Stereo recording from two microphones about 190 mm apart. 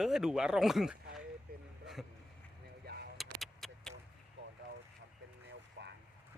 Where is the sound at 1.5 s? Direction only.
55° right (ahead or behind).